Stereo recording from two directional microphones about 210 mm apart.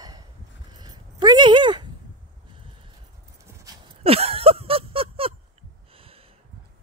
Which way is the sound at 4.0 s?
30° right (ahead or behind).